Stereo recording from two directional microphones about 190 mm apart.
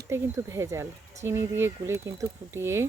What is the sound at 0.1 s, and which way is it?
Speech, 15° right (ahead or behind).